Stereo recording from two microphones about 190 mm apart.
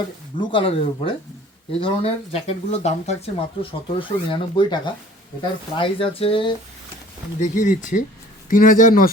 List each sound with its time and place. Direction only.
0.3 s speech: 30° left (ahead or behind)
7.5 s speech: 40° left (ahead or behind)